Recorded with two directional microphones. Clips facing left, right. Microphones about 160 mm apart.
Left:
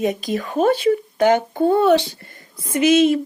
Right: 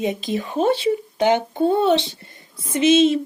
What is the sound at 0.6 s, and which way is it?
Speech, 25° right (ahead or behind).